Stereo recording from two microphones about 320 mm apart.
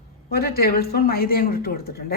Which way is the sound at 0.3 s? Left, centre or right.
Left.